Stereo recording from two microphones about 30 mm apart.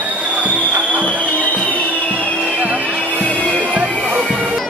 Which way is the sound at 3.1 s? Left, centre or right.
Left.